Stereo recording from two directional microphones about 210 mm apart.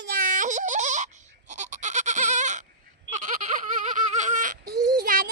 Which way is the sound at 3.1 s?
40° right (ahead or behind).